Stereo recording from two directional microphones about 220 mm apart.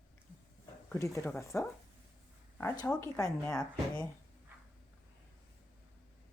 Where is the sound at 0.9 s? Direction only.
15° left (ahead or behind).